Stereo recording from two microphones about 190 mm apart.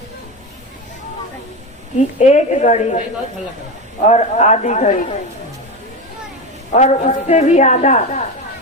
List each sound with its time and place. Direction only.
2.1 s a woman's voice: 35° left (ahead or behind)
4.0 s a woman's voice: 35° left (ahead or behind)
6.7 s a woman's voice: 40° left (ahead or behind)